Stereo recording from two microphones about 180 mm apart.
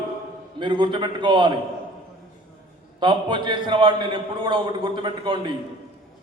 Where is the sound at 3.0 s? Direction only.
25° right (ahead or behind).